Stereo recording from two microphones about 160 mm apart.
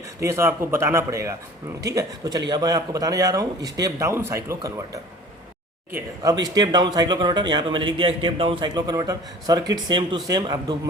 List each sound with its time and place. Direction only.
0.2 s a man's voice: 15° right (ahead or behind)
6.4 s speech: 25° right (ahead or behind)